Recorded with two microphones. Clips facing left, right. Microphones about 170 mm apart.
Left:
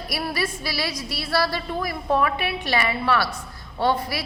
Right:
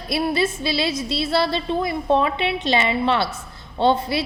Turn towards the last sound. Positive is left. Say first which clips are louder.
# right 4 dB
turn(degrees=-25)  # may be behind; listen again after turning